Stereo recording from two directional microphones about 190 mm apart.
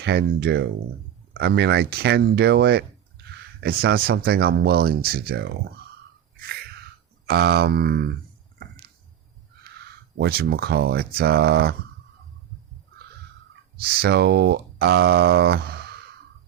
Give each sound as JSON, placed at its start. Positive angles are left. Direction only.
{"t": 0.0, "sound": "speech", "side_deg": -65}
{"t": 6.3, "sound": "a sound", "side_deg": -55}
{"t": 7.3, "sound": "speech", "side_deg": -55}
{"t": 8.5, "sound": "music", "side_deg": -55}
{"t": 10.2, "sound": "speech", "side_deg": -55}
{"t": 13.8, "sound": "speech", "side_deg": -55}